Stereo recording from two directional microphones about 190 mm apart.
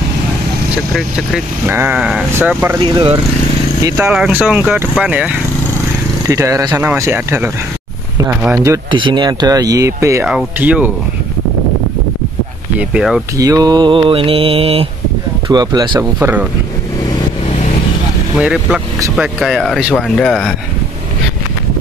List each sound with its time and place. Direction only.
0.9 s speech: 5° right (ahead or behind)
2.8 s mantra: 30° right (ahead or behind)
3.8 s speech: 15° right (ahead or behind)
6.2 s speech: 15° right (ahead or behind)
8.9 s mantra: 25° right (ahead or behind)
10.2 s speech: 5° right (ahead or behind)
12.7 s speech: 5° right (ahead or behind)
13.4 s mantra: 20° right (ahead or behind)
16.2 s speech: 10° right (ahead or behind)
18.4 s speech: 5° right (ahead or behind)